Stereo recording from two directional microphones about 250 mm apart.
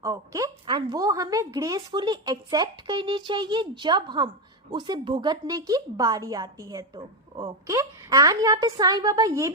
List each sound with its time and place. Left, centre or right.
0.0 s a woman's voice: centre